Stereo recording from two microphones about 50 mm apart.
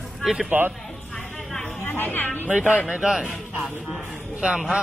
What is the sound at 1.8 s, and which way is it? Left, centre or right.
Speech, left.